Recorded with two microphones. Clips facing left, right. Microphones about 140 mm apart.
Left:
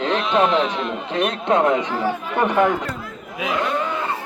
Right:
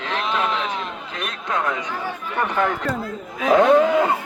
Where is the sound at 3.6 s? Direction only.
90° right.